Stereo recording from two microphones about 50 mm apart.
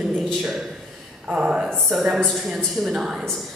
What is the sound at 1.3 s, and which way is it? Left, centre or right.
Speech, centre.